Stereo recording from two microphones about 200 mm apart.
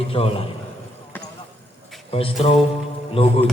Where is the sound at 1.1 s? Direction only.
10° left (ahead or behind).